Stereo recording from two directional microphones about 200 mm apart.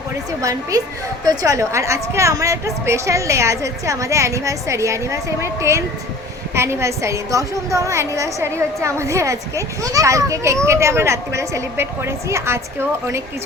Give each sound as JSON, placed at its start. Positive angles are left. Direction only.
{"t": 1.2, "sound": "a woman's voice", "side_deg": -20}